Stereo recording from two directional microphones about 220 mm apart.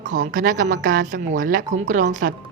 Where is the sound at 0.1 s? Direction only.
35° right (ahead or behind).